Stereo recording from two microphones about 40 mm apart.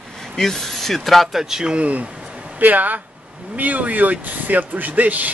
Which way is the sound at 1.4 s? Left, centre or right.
Centre.